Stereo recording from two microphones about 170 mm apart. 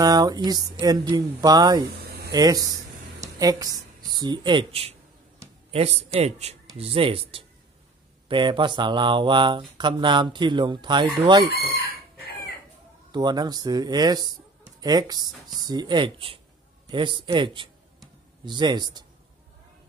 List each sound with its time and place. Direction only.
0.0 s speech: 20° right (ahead or behind)
2.0 s a sound: 70° right (ahead or behind)
2.3 s a man's voice: 20° right (ahead or behind)
13.1 s speech: 25° right (ahead or behind)